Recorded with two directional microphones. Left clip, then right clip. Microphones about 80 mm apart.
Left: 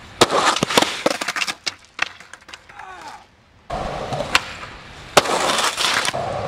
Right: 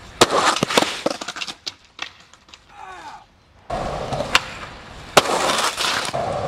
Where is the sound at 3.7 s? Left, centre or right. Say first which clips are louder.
Even; centre.